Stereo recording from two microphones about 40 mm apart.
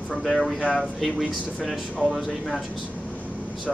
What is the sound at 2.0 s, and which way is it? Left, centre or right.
Speech, centre.